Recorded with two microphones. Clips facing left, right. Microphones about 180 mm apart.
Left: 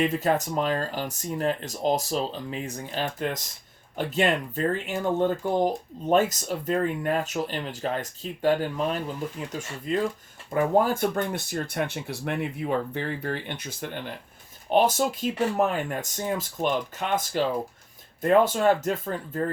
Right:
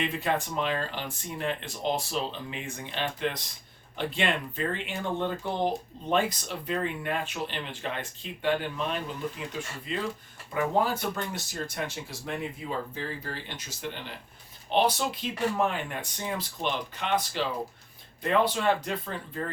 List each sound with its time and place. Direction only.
0.0 s speech: 40° left (ahead or behind)